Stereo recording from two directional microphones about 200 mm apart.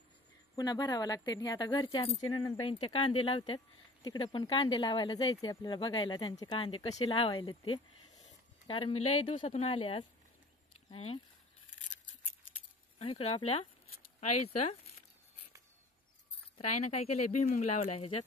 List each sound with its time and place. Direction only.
0.6 s speech: 20° left (ahead or behind)
13.0 s speech: 30° left (ahead or behind)
14.6 s a sound: 35° left (ahead or behind)
16.5 s speech: 30° left (ahead or behind)